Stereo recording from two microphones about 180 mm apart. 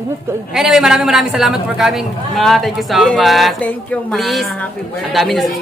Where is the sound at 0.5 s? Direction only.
Centre (ahead or behind).